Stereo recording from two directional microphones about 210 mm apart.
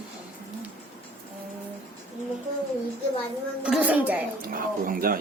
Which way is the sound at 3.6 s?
5° right (ahead or behind).